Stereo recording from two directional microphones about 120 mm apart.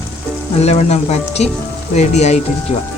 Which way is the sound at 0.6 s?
65° left (ahead or behind).